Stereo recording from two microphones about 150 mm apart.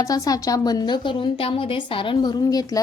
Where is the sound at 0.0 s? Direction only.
25° left (ahead or behind).